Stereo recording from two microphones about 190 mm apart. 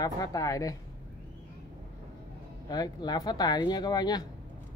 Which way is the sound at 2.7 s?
20° left (ahead or behind).